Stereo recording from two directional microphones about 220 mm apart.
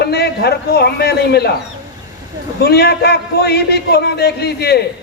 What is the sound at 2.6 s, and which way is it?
A man's voice, 45° left (ahead or behind).